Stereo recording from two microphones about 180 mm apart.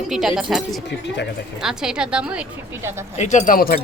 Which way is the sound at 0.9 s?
70° left (ahead or behind).